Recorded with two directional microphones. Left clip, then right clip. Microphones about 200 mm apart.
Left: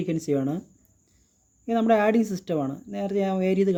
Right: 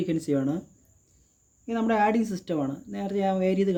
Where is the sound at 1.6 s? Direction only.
45° left (ahead or behind).